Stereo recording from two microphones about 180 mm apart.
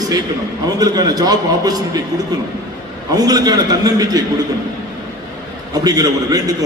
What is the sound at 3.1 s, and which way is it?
A man's voice, 20° right (ahead or behind).